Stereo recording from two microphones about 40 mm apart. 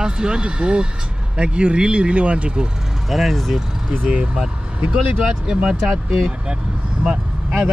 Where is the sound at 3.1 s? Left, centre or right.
Centre.